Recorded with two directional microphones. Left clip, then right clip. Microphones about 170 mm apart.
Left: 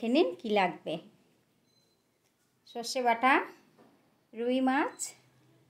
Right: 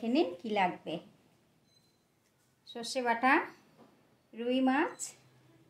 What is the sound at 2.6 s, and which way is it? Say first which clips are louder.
Speech: left 4 dB; 25° left (ahead or behind).